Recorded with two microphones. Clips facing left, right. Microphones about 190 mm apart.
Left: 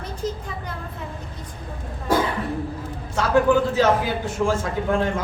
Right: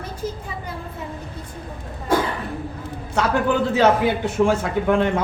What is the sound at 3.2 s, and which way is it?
A man's voice, 65° right (ahead or behind).